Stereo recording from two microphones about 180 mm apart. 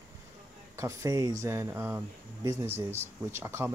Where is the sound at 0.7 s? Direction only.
15° right (ahead or behind).